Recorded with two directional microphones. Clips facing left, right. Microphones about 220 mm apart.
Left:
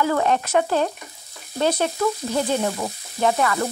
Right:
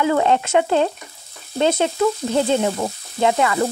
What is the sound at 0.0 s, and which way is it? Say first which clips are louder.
Frying: right 3 dB; 20° right (ahead or behind).